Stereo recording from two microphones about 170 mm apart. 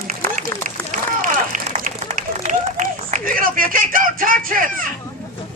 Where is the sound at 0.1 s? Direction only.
50° right (ahead or behind).